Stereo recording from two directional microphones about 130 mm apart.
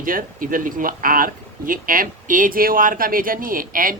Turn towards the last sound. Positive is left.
turn(degrees=-90)